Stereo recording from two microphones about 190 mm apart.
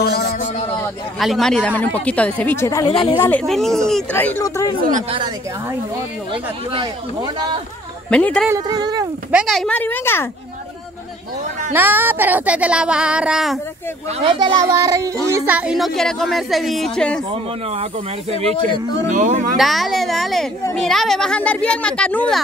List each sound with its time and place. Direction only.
0.3 s a sound: 35° left (ahead or behind)
0.7 s speech: centre (ahead or behind)
2.9 s speech: 25° left (ahead or behind)
3.2 s speech: 10° left (ahead or behind)
5.1 s speech: 25° right (ahead or behind)
8.1 s speech: 5° left (ahead or behind)
8.5 s speech: 20° right (ahead or behind)
9.3 s speech: centre (ahead or behind)
11.7 s speech: 10° right (ahead or behind)
14.2 s speech: 25° right (ahead or behind); by 17.2 s 5° left (ahead or behind)
19.0 s speech: 40° right (ahead or behind)
19.5 s speech: centre (ahead or behind)